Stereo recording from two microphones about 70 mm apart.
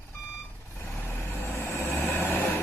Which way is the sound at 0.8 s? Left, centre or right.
Left.